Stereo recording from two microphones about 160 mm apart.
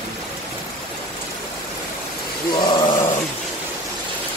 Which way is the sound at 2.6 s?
30° left (ahead or behind).